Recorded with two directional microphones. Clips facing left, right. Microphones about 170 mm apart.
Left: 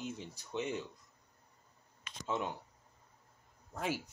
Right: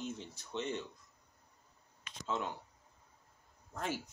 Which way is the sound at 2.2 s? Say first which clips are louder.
Left 1 dB; 15° left (ahead or behind).